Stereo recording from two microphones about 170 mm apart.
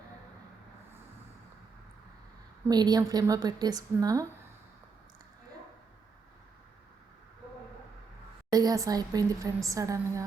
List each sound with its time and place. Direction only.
2.6 s a woman's voice: 25° right (ahead or behind)
8.4 s a woman's voice: 20° right (ahead or behind)